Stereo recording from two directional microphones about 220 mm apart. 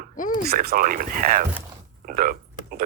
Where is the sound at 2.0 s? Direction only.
40° right (ahead or behind).